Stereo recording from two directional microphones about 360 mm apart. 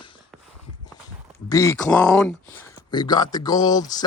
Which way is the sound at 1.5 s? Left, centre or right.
Centre.